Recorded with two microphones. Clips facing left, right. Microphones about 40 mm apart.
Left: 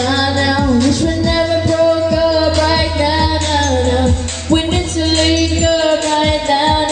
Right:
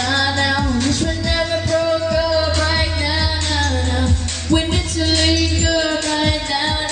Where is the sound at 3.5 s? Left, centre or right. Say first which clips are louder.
Left 7 dB; left.